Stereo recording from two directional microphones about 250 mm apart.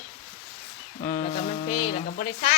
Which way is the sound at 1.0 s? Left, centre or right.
Left.